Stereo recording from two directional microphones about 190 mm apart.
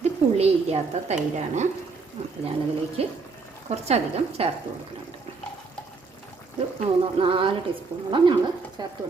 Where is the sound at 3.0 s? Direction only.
30° right (ahead or behind).